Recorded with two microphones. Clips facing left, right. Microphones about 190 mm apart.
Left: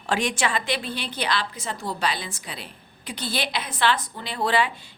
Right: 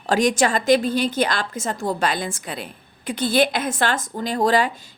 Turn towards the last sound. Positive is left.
turn(degrees=-40)  # may be behind; listen again after turning